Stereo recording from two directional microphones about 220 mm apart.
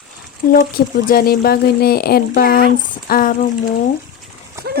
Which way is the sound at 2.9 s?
40° left (ahead or behind).